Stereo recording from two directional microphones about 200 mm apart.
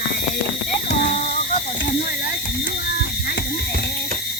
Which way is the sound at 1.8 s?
45° left (ahead or behind).